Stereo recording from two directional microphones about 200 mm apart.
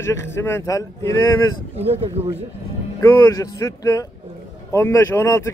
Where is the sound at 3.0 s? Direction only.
15° left (ahead or behind).